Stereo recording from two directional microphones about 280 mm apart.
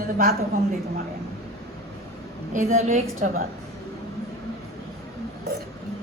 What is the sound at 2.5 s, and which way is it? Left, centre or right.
Speech, right.